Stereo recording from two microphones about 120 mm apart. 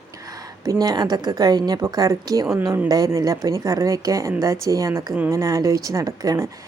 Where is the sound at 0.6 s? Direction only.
30° right (ahead or behind).